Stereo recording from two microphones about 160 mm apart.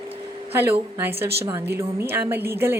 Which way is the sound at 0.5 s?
15° right (ahead or behind).